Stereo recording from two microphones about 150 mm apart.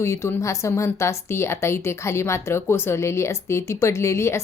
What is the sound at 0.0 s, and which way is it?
A woman's voice, 20° left (ahead or behind).